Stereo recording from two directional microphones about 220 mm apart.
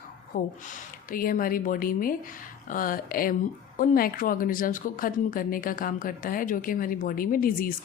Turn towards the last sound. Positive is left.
turn(degrees=40)  # may be behind; listen again after turning